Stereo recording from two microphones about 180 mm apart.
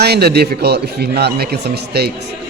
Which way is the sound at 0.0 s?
60° right (ahead or behind).